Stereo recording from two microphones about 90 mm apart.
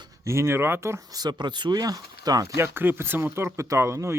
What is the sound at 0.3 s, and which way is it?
Speech, 30° right (ahead or behind).